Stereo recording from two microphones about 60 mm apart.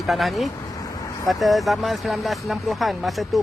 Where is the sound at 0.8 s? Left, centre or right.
Left.